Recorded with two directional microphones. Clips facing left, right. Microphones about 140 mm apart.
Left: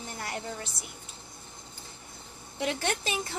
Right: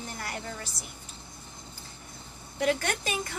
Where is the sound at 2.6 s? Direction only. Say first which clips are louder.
Right 3 dB; 25° left (ahead or behind).